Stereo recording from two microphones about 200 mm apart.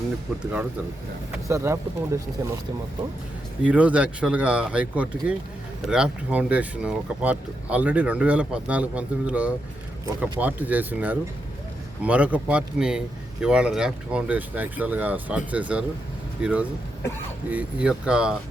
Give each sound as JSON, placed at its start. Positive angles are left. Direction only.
{"t": 1.5, "sound": "speech", "side_deg": -15}
{"t": 3.6, "sound": "speech", "side_deg": -5}